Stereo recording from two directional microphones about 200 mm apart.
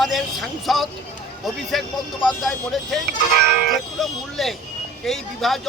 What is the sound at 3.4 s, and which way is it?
Speech, 55° right (ahead or behind).